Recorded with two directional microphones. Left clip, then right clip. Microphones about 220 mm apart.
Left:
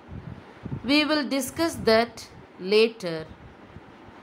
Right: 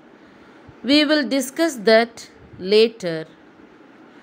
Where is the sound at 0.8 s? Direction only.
10° right (ahead or behind).